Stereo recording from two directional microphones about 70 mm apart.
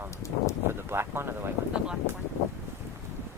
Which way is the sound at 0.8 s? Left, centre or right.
Right.